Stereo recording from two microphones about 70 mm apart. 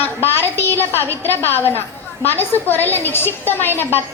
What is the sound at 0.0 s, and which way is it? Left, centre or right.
A woman's voice, left.